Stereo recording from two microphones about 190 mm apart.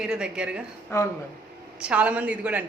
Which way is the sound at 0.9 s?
15° left (ahead or behind).